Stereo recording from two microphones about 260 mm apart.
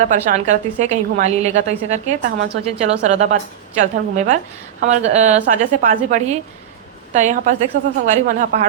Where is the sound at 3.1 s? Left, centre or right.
Right.